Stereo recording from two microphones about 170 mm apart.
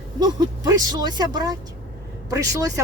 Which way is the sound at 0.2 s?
20° right (ahead or behind).